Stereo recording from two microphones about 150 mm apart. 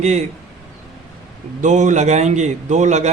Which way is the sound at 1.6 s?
55° right (ahead or behind).